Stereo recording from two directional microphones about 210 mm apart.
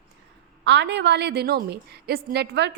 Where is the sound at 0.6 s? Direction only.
55° right (ahead or behind).